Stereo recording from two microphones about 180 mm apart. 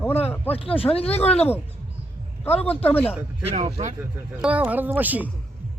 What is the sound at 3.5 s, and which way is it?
Speech, 35° right (ahead or behind).